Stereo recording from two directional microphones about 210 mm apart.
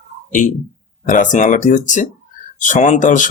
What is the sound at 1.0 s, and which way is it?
Speech, 40° left (ahead or behind).